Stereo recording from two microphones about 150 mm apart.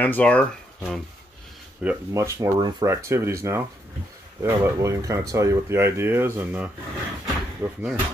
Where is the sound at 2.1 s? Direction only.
20° right (ahead or behind).